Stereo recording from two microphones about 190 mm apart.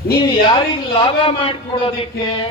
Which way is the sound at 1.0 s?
30° left (ahead or behind).